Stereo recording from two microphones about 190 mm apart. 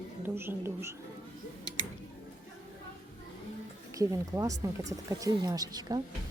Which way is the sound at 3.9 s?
15° right (ahead or behind).